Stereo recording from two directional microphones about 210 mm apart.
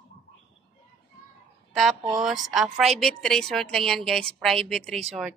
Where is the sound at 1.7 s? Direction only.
Centre (ahead or behind).